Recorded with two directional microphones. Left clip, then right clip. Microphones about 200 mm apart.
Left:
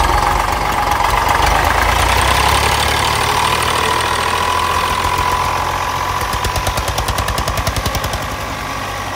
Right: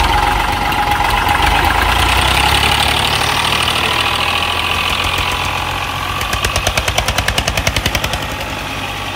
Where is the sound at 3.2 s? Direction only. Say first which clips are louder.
Even; 25° left (ahead or behind).